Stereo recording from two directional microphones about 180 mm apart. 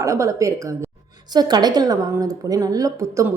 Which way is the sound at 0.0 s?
15° right (ahead or behind).